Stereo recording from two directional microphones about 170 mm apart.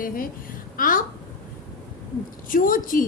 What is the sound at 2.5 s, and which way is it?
Speech, 55° left (ahead or behind).